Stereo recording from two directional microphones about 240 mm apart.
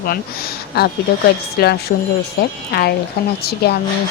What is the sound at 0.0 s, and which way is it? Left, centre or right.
Speech, left.